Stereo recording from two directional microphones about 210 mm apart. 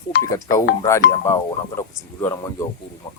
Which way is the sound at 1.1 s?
15° left (ahead or behind).